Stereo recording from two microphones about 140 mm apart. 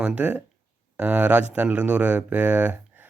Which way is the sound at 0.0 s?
10° right (ahead or behind).